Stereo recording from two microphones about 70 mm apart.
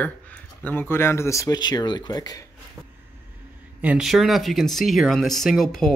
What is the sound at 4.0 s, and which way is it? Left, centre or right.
Speech, centre.